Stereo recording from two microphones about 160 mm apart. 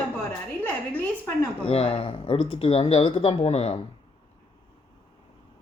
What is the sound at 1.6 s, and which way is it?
Speech, 35° left (ahead or behind).